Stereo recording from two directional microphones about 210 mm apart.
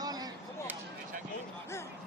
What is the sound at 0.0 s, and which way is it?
Chop, 20° right (ahead or behind).